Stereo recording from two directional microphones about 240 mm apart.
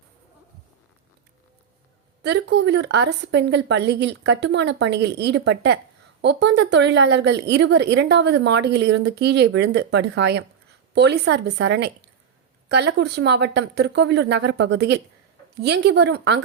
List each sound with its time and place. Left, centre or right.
2.2 s a woman's voice: right